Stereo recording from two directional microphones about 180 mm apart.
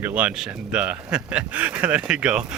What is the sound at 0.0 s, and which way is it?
Speech, 10° right (ahead or behind).